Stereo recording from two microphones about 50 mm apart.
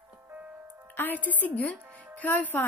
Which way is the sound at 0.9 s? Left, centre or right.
Left.